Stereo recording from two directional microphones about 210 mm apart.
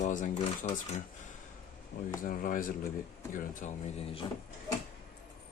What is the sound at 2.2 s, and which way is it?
Speech, 40° left (ahead or behind).